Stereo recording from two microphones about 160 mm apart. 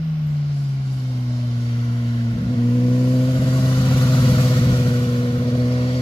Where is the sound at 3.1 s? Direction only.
30° left (ahead or behind).